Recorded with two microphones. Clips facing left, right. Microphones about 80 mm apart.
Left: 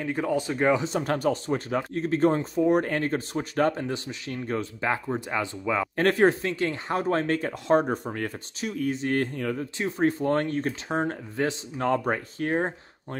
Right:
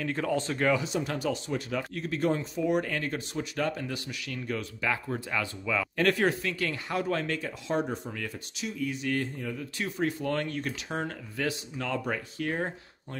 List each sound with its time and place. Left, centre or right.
0.0 s speech: centre
0.8 s speech: left
8.9 s speech: left
9.2 s speech: left
9.8 s speech: left